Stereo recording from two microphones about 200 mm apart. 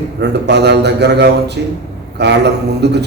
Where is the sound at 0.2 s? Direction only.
55° right (ahead or behind).